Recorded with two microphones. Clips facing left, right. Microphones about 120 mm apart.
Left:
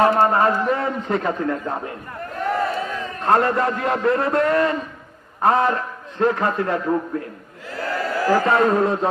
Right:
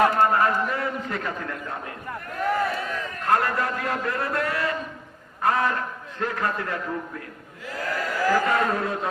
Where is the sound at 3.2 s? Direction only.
30° left (ahead or behind).